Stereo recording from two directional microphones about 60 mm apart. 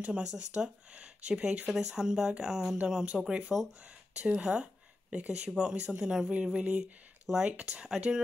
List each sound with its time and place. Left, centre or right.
0.0 s speech: centre
5.5 s speech: centre